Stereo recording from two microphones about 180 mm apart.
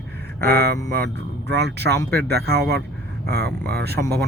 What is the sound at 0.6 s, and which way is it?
Speech, 60° right (ahead or behind).